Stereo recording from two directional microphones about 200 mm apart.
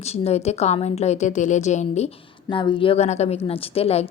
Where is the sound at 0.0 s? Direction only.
35° left (ahead or behind).